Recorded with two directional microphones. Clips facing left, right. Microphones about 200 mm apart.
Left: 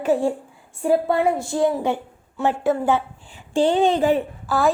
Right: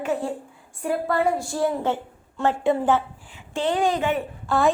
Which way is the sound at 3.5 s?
30° left (ahead or behind).